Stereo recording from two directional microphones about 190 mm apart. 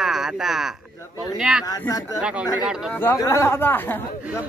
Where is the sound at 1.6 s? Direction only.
20° left (ahead or behind).